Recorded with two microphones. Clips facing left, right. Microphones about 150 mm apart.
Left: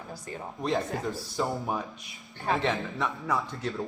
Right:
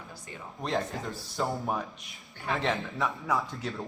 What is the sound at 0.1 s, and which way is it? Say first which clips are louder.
Speech: left 6 dB; 45° left (ahead or behind).